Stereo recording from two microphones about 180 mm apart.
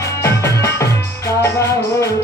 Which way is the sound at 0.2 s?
15° left (ahead or behind).